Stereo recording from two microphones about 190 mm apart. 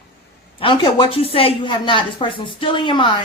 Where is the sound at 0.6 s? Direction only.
25° left (ahead or behind).